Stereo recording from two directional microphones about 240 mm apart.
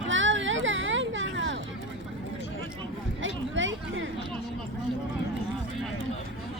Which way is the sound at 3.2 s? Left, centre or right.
Right.